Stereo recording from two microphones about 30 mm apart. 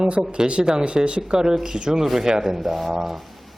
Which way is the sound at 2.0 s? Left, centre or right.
Centre.